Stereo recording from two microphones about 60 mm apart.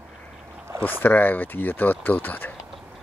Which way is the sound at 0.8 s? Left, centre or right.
Left.